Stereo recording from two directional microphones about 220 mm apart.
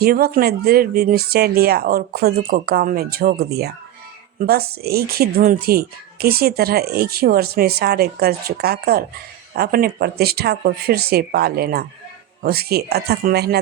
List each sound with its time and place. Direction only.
0.0 s speech: 45° right (ahead or behind)